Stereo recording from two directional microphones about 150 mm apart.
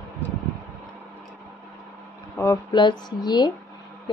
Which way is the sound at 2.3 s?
20° left (ahead or behind).